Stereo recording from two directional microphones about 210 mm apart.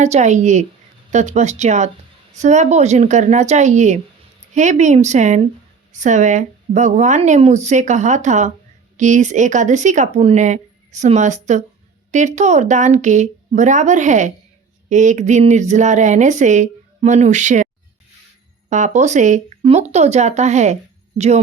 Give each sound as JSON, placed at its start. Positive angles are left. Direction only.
{"t": 0.0, "sound": "speech", "side_deg": -35}
{"t": 18.7, "sound": "speech", "side_deg": -35}